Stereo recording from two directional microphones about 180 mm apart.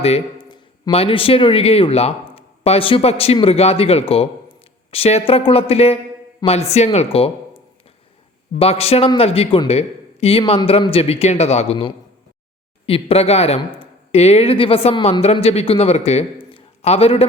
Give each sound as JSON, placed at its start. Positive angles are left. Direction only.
{"t": 0.0, "sound": "speech", "side_deg": 30}